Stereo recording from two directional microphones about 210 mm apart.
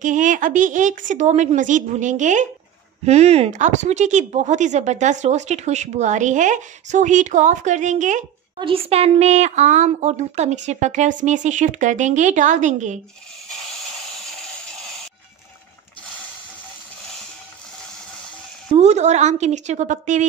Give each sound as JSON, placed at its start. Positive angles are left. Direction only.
{"t": 0.0, "sound": "speech", "side_deg": -35}
{"t": 8.5, "sound": "speech", "side_deg": -25}
{"t": 18.7, "sound": "speech", "side_deg": -30}